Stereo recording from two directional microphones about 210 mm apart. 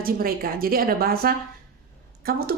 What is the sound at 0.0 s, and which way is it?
A woman's voice, 45° right (ahead or behind).